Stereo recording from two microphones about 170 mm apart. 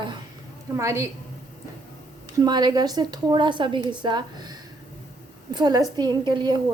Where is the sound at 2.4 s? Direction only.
25° right (ahead or behind).